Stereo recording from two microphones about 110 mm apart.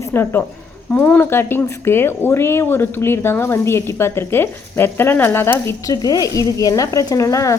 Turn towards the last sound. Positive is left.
turn(degrees=30)  # may be behind; listen again after turning